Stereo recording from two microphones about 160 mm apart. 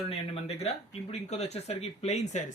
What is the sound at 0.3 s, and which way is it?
Speech, 40° left (ahead or behind).